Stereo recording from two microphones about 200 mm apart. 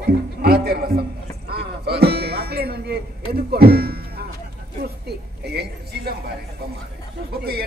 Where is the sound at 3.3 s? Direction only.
50° right (ahead or behind).